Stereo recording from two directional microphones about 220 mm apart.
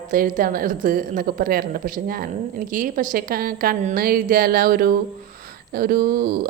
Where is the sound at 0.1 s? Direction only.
40° right (ahead or behind).